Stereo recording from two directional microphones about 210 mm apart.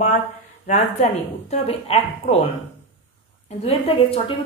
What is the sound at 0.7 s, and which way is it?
A woman's voice, 30° left (ahead or behind).